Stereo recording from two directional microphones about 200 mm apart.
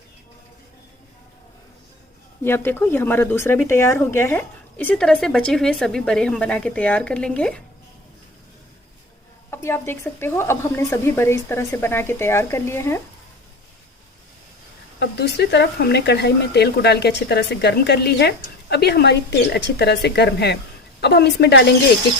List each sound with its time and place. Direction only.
2.4 s speech: 10° left (ahead or behind)
9.5 s speech: 10° left (ahead or behind)
14.9 s speech: 55° left (ahead or behind)